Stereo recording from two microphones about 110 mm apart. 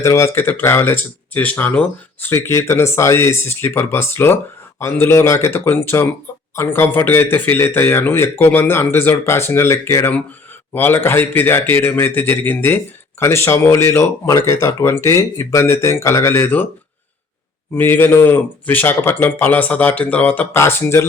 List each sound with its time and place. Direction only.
0.0 s a man's voice: 25° left (ahead or behind)
2.3 s a man's voice: 25° left (ahead or behind)
17.7 s speech: 20° left (ahead or behind)